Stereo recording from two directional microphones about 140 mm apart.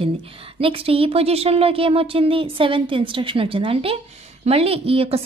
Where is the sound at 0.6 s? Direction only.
40° right (ahead or behind).